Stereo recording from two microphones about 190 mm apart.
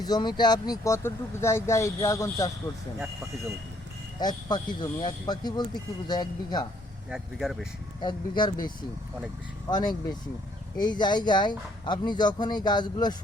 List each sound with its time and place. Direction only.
0.0 s speech: 20° left (ahead or behind)
4.2 s speech: 20° left (ahead or behind)
7.1 s speech: centre (ahead or behind)
8.0 s speech: 25° left (ahead or behind)
9.6 s speech: 20° left (ahead or behind)